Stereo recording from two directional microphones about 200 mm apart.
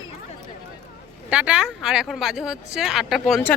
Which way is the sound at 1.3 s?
5° right (ahead or behind).